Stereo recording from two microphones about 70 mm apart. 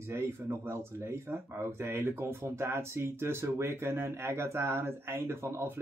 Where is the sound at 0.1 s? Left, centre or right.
Right.